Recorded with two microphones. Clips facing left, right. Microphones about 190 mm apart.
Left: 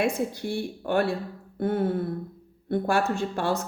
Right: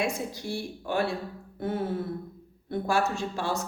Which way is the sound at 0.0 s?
60° left (ahead or behind).